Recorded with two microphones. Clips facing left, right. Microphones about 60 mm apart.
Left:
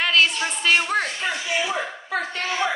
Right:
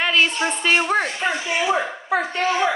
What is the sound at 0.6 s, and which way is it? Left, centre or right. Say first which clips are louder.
Speech: right 1 dB; centre.